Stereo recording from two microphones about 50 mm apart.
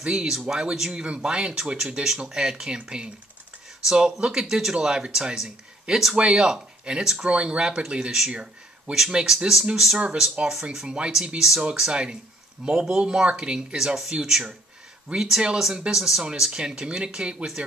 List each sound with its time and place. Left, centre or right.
0.0 s speech: centre
9.9 s speech: right
10.4 s speech: centre
10.9 s speech: right
15.1 s speech: centre